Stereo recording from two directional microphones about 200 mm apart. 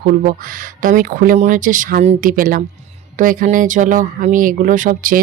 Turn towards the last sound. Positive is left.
turn(degrees=-45)  # may be behind; listen again after turning